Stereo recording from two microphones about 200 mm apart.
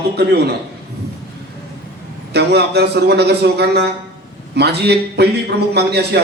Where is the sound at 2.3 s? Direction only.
55° right (ahead or behind).